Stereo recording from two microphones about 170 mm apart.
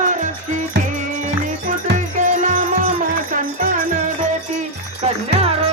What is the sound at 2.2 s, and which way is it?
Music, 50° right (ahead or behind).